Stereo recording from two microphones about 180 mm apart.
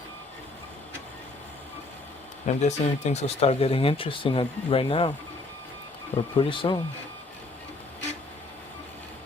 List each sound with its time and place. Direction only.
2.5 s speech: 40° left (ahead or behind)
6.1 s speech: 30° left (ahead or behind)